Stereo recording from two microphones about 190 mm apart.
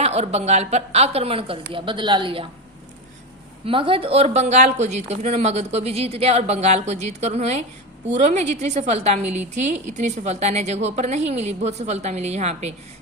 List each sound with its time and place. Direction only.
0.0 s a woman's voice: 35° right (ahead or behind)
3.7 s a woman's voice: 25° right (ahead or behind)